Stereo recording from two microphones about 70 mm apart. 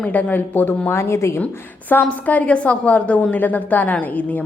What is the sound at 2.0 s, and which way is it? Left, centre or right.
A woman's voice, left.